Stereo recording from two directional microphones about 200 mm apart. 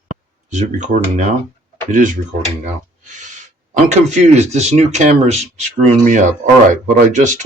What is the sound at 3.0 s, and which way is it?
Gasp, 40° right (ahead or behind).